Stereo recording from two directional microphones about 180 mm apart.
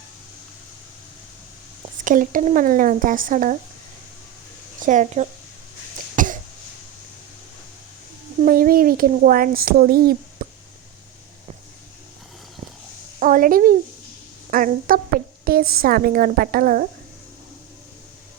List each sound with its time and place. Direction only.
2.0 s a child's voice: 45° right (ahead or behind)
4.8 s a child's voice: 45° right (ahead or behind)
6.1 s cough: 45° right (ahead or behind)
8.4 s a child's voice: 50° right (ahead or behind)
13.1 s a child's voice: 45° right (ahead or behind)